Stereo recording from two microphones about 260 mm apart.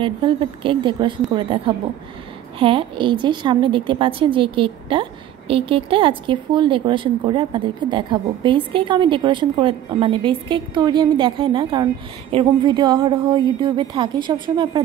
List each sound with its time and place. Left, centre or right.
0.0 s a woman's voice: centre